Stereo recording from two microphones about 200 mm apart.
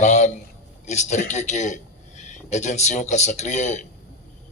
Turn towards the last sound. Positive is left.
turn(degrees=35)  # may be behind; listen again after turning